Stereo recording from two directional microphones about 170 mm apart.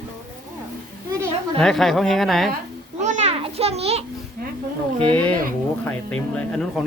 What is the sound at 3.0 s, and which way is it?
Children playing, 40° right (ahead or behind).